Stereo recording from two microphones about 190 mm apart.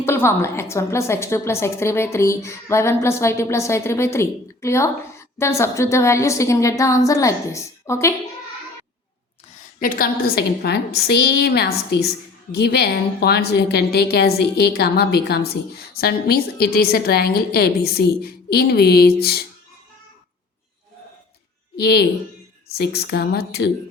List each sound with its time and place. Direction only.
0.0 s a woman's voice: 15° left (ahead or behind)
9.8 s a woman's voice: 50° left (ahead or behind)
21.8 s a woman's voice: 60° left (ahead or behind)